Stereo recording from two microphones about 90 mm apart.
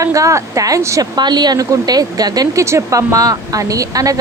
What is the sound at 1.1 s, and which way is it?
A woman's voice, 55° right (ahead or behind).